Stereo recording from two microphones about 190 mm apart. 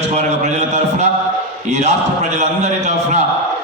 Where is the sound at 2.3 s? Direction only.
35° right (ahead or behind).